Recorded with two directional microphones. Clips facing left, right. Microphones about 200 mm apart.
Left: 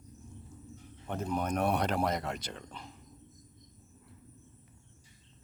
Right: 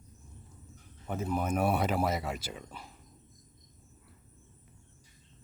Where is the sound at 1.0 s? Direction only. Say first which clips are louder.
Right 1 dB; 5° right (ahead or behind).